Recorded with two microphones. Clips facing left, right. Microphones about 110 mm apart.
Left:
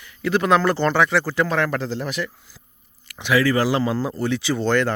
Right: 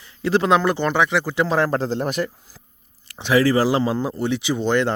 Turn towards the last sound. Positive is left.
turn(degrees=-20)  # may be behind; listen again after turning